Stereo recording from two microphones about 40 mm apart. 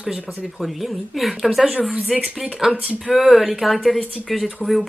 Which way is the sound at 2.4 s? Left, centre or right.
Centre.